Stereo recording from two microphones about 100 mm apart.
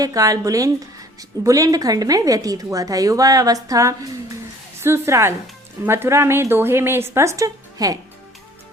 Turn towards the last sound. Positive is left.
turn(degrees=-35)  # may be behind; listen again after turning